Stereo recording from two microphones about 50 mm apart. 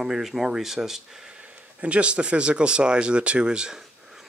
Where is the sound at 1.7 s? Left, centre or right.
Right.